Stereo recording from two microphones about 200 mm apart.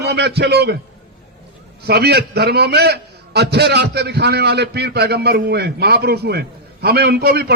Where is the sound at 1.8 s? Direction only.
55° right (ahead or behind).